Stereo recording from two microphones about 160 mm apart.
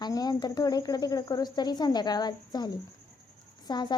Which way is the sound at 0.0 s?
25° left (ahead or behind).